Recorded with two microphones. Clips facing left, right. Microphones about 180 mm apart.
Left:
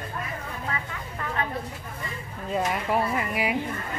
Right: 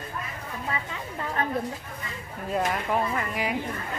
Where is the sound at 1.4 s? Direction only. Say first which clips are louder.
Right 2 dB; 45° right (ahead or behind).